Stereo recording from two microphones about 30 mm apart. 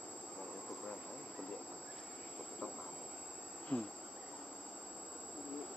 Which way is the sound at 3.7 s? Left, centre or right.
Left.